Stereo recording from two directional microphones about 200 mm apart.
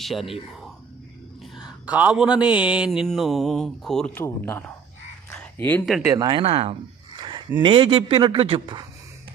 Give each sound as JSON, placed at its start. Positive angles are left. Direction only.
{"t": 0.0, "sound": "speech", "side_deg": 0}
{"t": 1.5, "sound": "speech", "side_deg": -5}
{"t": 5.3, "sound": "a sound", "side_deg": 5}
{"t": 6.0, "sound": "a man's voice", "side_deg": -20}
{"t": 7.2, "sound": "a sound", "side_deg": -25}
{"t": 7.6, "sound": "a man's voice", "side_deg": -25}